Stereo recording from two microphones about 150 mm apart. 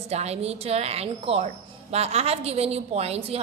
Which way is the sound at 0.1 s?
45° right (ahead or behind).